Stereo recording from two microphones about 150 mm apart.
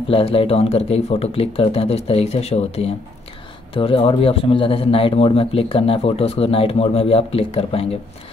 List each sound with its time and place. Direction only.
0.1 s a man's voice: 40° left (ahead or behind)